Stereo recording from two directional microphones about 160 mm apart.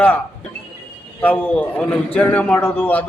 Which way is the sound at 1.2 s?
10° left (ahead or behind).